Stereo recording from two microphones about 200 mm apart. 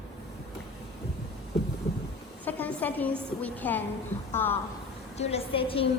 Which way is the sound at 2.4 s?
10° left (ahead or behind).